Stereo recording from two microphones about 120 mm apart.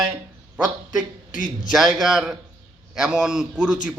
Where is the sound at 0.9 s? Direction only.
90° left.